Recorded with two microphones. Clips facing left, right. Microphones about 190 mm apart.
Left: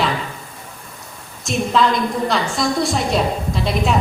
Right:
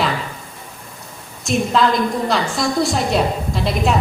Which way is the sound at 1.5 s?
Centre (ahead or behind).